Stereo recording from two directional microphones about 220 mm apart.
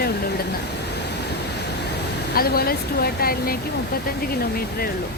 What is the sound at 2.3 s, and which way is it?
Speech, 45° left (ahead or behind).